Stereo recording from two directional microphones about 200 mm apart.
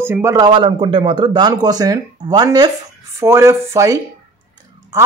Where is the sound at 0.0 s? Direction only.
10° right (ahead or behind).